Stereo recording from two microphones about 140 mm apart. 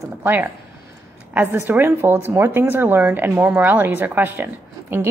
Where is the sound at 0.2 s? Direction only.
15° right (ahead or behind).